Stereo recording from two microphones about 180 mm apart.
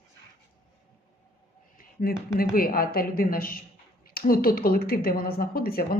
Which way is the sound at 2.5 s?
55° left (ahead or behind).